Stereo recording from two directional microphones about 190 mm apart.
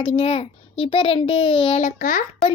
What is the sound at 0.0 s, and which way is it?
A child's voice, 30° left (ahead or behind).